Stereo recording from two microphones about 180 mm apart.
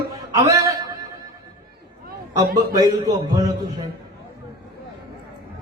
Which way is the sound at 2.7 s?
20° right (ahead or behind).